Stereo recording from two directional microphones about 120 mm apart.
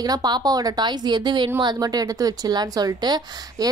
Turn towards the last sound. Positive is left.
turn(degrees=-35)  # may be behind; listen again after turning